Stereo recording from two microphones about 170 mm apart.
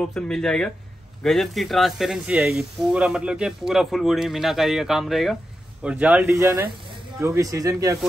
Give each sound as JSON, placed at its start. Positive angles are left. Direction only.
{"t": 0.1, "sound": "speech", "side_deg": 5}